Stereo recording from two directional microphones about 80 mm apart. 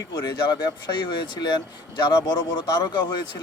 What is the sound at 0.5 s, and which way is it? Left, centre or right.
Speech, left.